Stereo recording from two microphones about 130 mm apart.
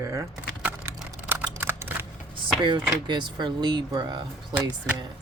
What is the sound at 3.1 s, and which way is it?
Speech, 35° right (ahead or behind).